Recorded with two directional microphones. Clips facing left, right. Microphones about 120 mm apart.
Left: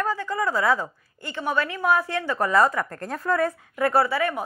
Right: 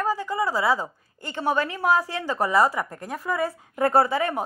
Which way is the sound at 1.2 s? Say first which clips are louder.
Right 1 dB; 35° right (ahead or behind).